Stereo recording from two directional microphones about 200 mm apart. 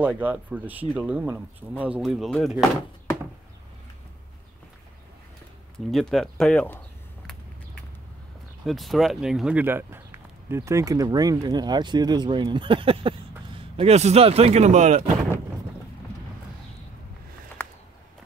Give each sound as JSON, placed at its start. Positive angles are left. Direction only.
{"t": 0.0, "sound": "speech", "side_deg": -10}
{"t": 5.9, "sound": "speech", "side_deg": 0}
{"t": 8.6, "sound": "speech", "side_deg": 0}